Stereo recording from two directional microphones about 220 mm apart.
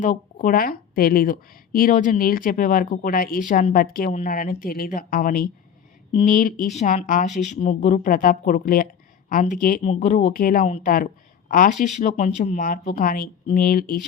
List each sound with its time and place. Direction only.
0.0 s speech: 35° left (ahead or behind)